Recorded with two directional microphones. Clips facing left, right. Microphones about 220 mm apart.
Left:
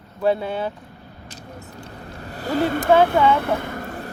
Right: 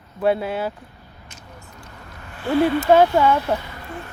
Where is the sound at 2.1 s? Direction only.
35° left (ahead or behind).